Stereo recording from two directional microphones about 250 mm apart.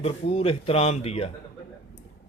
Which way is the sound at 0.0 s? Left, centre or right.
Left.